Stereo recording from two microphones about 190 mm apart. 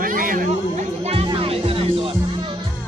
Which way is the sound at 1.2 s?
30° right (ahead or behind).